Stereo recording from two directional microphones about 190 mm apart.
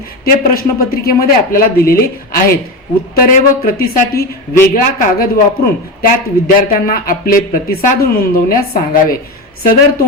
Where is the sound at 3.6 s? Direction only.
55° left (ahead or behind).